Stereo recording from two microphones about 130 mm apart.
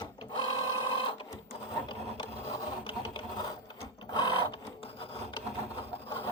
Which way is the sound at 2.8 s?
45° left (ahead or behind).